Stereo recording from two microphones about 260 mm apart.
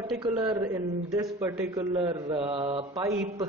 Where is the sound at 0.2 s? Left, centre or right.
Centre.